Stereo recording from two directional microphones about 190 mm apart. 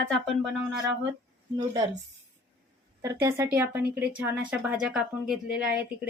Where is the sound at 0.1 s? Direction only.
Centre (ahead or behind).